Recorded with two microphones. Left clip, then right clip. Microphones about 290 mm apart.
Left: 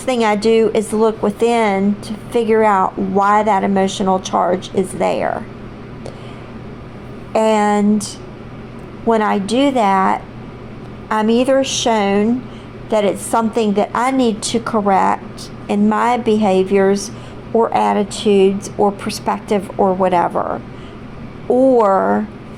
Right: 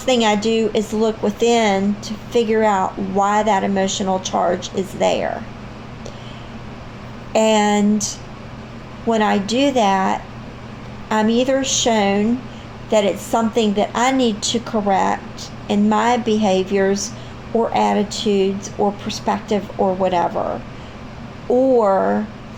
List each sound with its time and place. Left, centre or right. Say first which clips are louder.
0.0 s speech: left 1 dB; left
7.3 s speech: left 2 dB; left
21.5 s speech: left 3 dB; left